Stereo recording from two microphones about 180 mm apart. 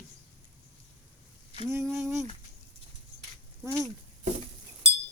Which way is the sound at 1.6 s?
15° right (ahead or behind).